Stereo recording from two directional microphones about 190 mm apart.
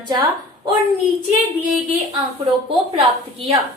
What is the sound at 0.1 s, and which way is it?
Speech, 25° right (ahead or behind).